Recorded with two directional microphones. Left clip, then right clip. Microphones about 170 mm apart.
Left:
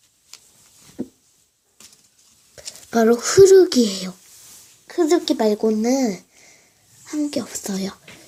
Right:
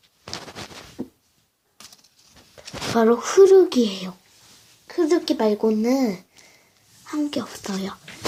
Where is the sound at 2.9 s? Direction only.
20° left (ahead or behind).